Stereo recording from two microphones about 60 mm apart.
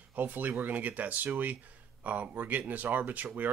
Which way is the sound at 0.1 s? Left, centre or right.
Right.